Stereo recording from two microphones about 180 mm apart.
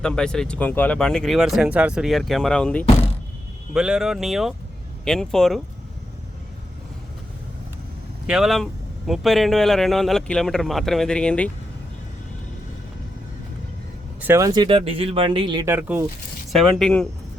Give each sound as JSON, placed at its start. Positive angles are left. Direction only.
{"t": 0.0, "sound": "speech", "side_deg": 5}
{"t": 8.3, "sound": "speech", "side_deg": 0}
{"t": 14.2, "sound": "speech", "side_deg": -15}
{"t": 15.6, "sound": "speech", "side_deg": -10}
{"t": 16.5, "sound": "speech", "side_deg": 0}